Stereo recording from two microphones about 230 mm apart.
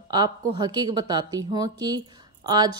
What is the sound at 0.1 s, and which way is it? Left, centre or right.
A woman's voice, centre.